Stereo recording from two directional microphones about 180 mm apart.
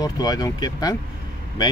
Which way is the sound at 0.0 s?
20° left (ahead or behind).